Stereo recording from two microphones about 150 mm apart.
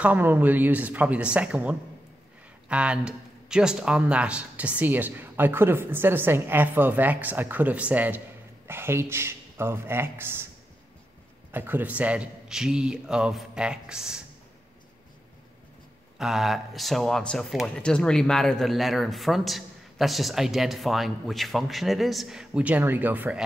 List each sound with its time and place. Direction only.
0.0 s speech: 10° right (ahead or behind)
11.5 s a man's voice: 15° right (ahead or behind)
16.2 s a man's voice: 5° right (ahead or behind)